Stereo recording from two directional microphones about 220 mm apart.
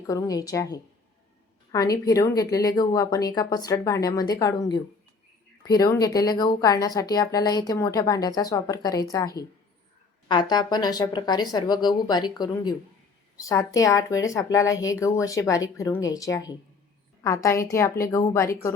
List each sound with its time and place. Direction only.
0.1 s a woman's voice: 15° left (ahead or behind)